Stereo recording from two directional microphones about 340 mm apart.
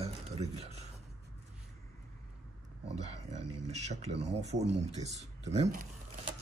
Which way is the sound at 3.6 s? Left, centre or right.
Centre.